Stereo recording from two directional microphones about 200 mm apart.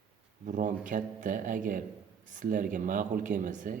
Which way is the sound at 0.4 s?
40° right (ahead or behind).